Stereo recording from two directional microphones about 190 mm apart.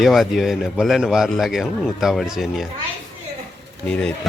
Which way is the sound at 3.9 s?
5° left (ahead or behind).